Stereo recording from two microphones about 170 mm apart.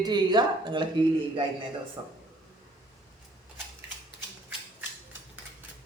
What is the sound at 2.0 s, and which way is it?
Speech, 25° right (ahead or behind).